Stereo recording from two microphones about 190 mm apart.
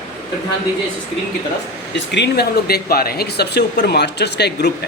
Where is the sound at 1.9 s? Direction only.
65° left (ahead or behind).